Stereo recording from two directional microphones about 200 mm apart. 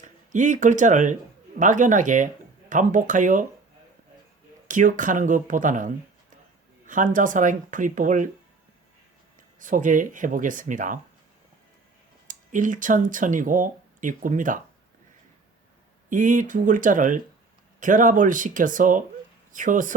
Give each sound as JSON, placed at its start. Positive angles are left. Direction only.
{"t": 0.0, "sound": "speech", "side_deg": -40}
{"t": 4.7, "sound": "speech", "side_deg": -40}
{"t": 9.6, "sound": "speech", "side_deg": -40}
{"t": 12.3, "sound": "speech", "side_deg": -40}
{"t": 16.0, "sound": "speech", "side_deg": -40}